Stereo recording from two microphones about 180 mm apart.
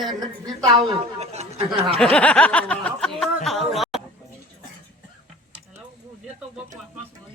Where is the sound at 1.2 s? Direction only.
35° right (ahead or behind).